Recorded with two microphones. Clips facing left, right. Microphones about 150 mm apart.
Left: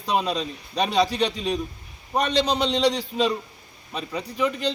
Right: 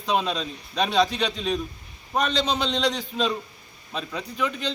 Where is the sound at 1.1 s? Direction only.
35° left (ahead or behind).